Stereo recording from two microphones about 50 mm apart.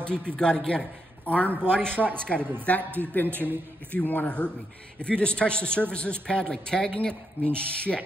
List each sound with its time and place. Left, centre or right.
0.0 s a man's voice: left
1.2 s a man's voice: left
3.3 s a man's voice: right
3.9 s speech: left
4.9 s speech: left